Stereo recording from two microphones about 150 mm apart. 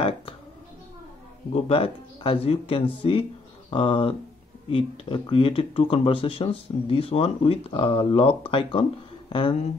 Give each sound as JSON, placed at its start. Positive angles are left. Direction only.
{"t": 1.5, "sound": "speech", "side_deg": 40}